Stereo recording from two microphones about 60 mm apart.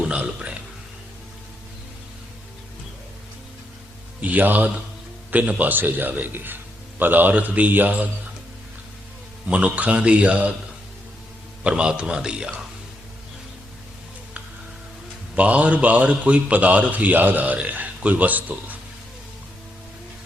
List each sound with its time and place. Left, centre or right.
4.2 s a man's voice: right
9.5 s a man's voice: right
11.6 s a man's voice: centre
15.4 s a man's voice: right